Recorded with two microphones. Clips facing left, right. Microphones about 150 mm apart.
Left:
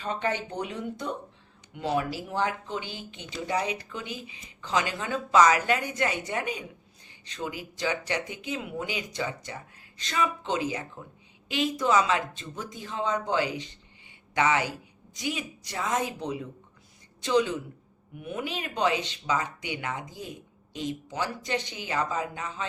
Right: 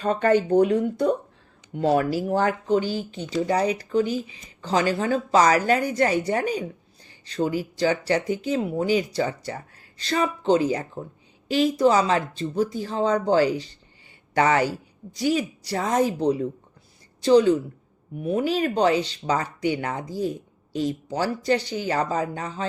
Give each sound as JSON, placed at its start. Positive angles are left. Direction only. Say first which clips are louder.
{"t": 0.0, "sound": "a woman's voice", "louder": "right 10 dB", "side_deg": -50}